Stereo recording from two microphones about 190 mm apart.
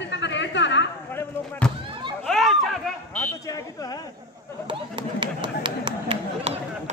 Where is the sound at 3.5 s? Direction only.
20° left (ahead or behind).